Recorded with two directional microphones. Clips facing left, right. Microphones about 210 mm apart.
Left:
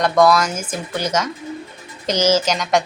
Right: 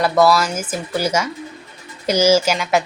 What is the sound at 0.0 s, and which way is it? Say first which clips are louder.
Speech: even; 5° right (ahead or behind).